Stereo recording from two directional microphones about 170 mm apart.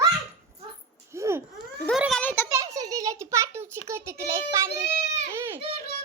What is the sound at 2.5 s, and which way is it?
A child's voice, 20° right (ahead or behind).